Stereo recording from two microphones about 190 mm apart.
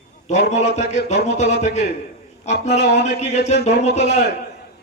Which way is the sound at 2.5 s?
65° left (ahead or behind).